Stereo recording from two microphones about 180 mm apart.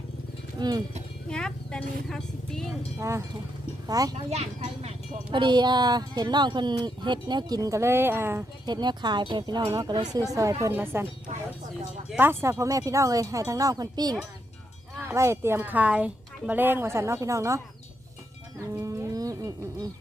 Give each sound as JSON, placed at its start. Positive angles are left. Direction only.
{"t": 0.6, "sound": "speech", "side_deg": -20}
{"t": 1.3, "sound": "music", "side_deg": 5}
{"t": 3.0, "sound": "a woman's voice", "side_deg": -15}
{"t": 4.3, "sound": "speech", "side_deg": -35}
{"t": 12.1, "sound": "a woman's voice", "side_deg": -10}
{"t": 18.7, "sound": "livestock", "side_deg": -20}